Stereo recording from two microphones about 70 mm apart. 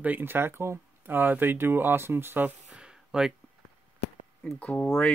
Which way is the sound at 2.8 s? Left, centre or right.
Centre.